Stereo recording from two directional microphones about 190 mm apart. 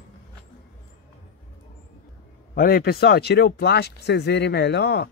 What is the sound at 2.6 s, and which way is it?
Speech, 50° left (ahead or behind).